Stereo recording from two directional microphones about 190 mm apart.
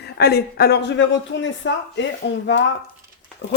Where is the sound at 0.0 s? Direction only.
60° left (ahead or behind).